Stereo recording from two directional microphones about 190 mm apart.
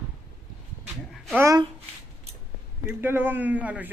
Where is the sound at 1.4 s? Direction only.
15° right (ahead or behind).